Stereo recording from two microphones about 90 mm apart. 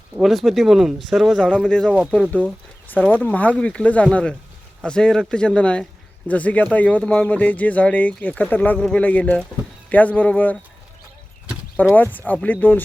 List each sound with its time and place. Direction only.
0.2 s speech: centre (ahead or behind)
1.9 s speech: 15° right (ahead or behind)
2.9 s speech: 20° left (ahead or behind)
11.9 s speech: 20° left (ahead or behind)